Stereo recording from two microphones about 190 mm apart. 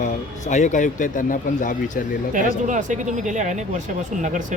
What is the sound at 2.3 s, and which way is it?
Speech, 40° right (ahead or behind).